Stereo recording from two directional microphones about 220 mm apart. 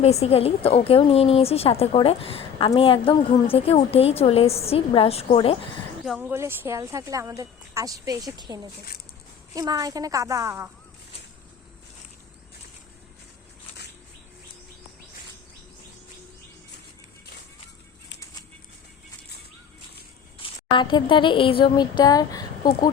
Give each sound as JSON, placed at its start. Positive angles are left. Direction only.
{"t": 0.0, "sound": "speech", "side_deg": 30}
{"t": 6.1, "sound": "speech", "side_deg": -5}
{"t": 20.7, "sound": "speech", "side_deg": 20}